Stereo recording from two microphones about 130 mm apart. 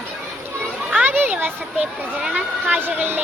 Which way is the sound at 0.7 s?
10° right (ahead or behind).